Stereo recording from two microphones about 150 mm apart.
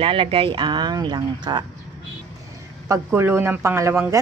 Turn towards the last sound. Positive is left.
turn(degrees=-20)  # may be behind; listen again after turning